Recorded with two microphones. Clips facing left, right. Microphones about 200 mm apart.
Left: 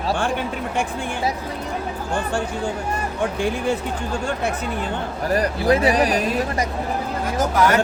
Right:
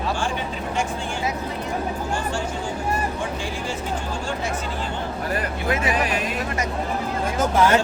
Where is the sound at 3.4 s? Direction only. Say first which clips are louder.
Left 7 dB; 60° left (ahead or behind).